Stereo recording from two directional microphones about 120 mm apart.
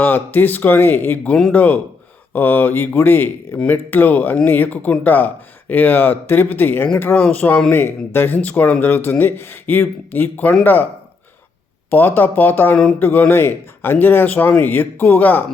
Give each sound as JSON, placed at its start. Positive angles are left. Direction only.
{"t": 0.0, "sound": "speech", "side_deg": 15}
{"t": 11.9, "sound": "speech", "side_deg": 15}